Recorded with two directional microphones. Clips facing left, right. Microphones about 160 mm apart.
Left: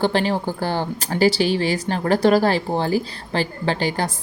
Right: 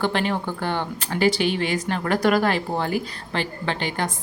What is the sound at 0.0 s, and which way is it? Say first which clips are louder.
Speech: left 3 dB; 35° left (ahead or behind).